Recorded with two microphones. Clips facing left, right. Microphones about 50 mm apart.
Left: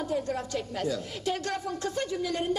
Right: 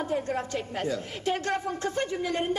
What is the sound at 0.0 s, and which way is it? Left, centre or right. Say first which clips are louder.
A woman's voice: right 1 dB; right.